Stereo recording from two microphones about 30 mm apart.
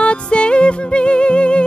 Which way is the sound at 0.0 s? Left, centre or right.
Left.